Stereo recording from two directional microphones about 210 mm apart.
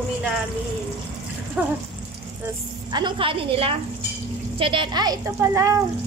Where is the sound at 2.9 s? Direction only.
25° right (ahead or behind).